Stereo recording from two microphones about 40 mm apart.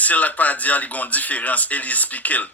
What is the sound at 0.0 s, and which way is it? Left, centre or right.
Speech, left.